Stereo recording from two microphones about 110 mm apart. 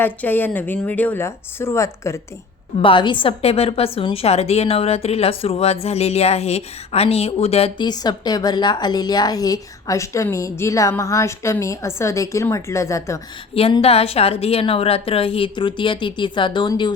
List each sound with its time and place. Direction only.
0.0 s speech: 15° left (ahead or behind)
2.8 s a woman's voice: 50° left (ahead or behind); by 7.7 s 65° left (ahead or behind)
7.8 s a woman's voice: 40° left (ahead or behind)
13.5 s a woman's voice: 60° left (ahead or behind); by 16.9 s 45° left (ahead or behind)